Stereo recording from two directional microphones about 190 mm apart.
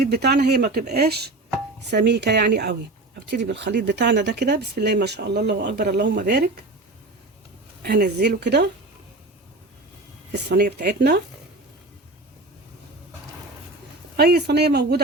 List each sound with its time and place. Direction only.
0.1 s speech: 60° right (ahead or behind)
7.8 s speech: 55° right (ahead or behind)
10.3 s speech: 60° right (ahead or behind)
14.2 s speech: 55° right (ahead or behind)